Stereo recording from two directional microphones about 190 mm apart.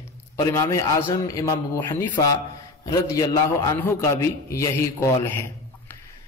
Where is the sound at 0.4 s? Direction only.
15° left (ahead or behind).